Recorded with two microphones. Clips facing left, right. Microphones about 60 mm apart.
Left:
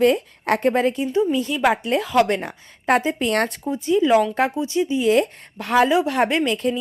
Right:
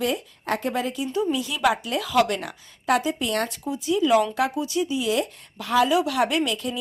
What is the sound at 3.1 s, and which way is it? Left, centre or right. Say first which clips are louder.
Speech: left 5 dB; left.